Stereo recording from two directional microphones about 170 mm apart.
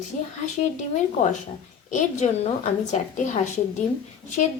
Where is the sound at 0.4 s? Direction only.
45° left (ahead or behind).